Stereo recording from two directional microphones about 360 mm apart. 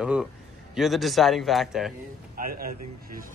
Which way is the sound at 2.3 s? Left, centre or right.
Right.